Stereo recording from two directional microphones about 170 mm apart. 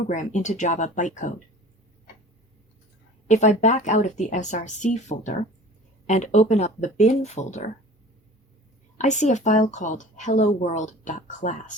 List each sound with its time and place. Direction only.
0.1 s a woman's voice: 45° left (ahead or behind)
3.2 s a woman's voice: 45° left (ahead or behind)
9.0 s a woman's voice: 45° left (ahead or behind)